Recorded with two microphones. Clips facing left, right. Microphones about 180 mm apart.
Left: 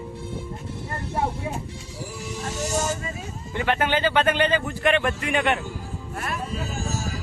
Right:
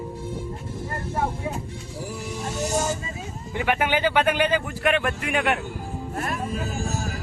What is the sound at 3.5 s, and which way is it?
A man's voice, 10° right (ahead or behind).